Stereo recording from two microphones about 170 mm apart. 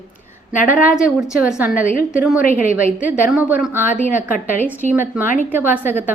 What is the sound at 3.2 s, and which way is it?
A woman's voice, 10° right (ahead or behind).